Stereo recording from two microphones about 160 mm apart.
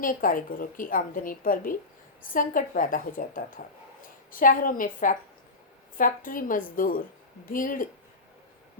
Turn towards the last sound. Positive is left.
turn(degrees=60)  # may be behind; listen again after turning